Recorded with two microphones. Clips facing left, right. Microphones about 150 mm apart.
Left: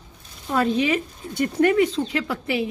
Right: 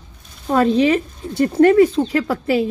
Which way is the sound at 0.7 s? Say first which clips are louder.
Right 6 dB; 35° right (ahead or behind).